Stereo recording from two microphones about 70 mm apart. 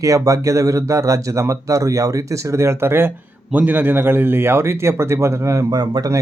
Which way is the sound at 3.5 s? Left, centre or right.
Right.